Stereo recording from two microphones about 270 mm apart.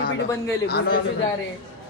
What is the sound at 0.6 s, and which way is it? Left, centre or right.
Speech, left.